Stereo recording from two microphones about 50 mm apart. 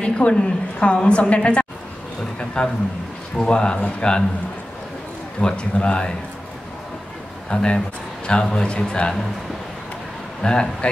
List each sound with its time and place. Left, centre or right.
0.0 s a woman's voice: left
5.4 s a woman's voice: left
7.4 s a woman's voice: centre
10.4 s speech: centre